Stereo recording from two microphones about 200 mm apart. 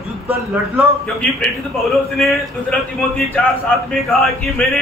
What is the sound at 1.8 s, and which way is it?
Speech, centre (ahead or behind).